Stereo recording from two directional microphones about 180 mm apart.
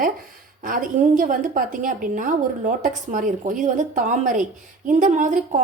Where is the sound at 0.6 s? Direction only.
50° right (ahead or behind).